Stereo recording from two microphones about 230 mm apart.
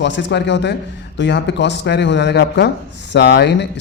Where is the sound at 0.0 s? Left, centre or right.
Left.